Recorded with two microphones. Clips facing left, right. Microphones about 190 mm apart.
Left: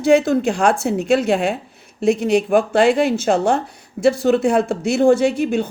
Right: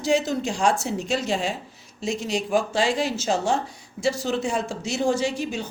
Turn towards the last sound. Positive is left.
turn(degrees=55)  # may be behind; listen again after turning